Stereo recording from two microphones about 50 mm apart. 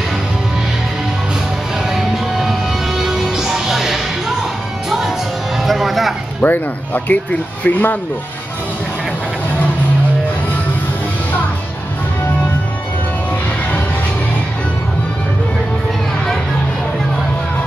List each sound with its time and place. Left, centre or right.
1.9 s music: centre
6.4 s speech: left